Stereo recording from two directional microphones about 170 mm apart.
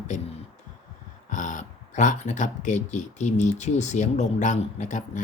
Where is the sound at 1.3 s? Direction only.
45° left (ahead or behind).